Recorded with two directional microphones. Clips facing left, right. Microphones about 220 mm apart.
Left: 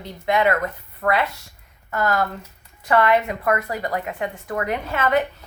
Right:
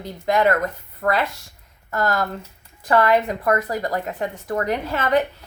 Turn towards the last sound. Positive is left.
turn(degrees=-35)  # may be behind; listen again after turning